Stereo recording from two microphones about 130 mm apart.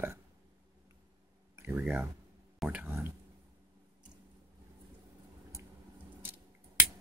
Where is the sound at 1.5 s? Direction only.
15° right (ahead or behind).